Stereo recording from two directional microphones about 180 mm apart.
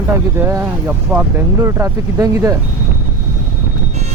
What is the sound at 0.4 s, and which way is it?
Speech, 15° right (ahead or behind).